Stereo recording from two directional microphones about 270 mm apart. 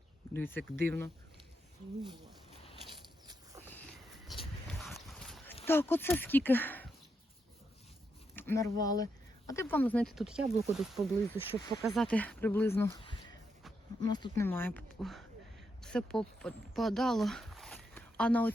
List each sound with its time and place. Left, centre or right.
0.3 s speech: centre
3.6 s a sound: centre
5.6 s speech: centre
8.4 s speech: centre
14.0 s speech: centre